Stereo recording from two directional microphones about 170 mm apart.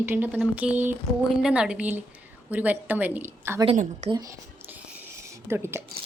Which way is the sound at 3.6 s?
40° right (ahead or behind).